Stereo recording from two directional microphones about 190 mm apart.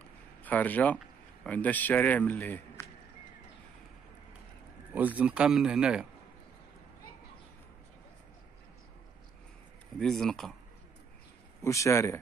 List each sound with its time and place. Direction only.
0.4 s speech: 10° left (ahead or behind)
4.9 s speech: 10° right (ahead or behind)
9.9 s speech: centre (ahead or behind)
11.6 s speech: 15° left (ahead or behind)